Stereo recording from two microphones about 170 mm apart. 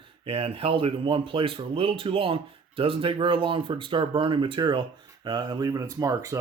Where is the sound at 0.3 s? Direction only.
35° right (ahead or behind).